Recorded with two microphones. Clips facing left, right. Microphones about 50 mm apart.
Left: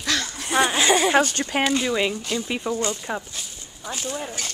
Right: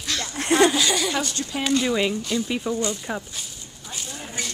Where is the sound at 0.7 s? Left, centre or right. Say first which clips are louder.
Left 3 dB; left.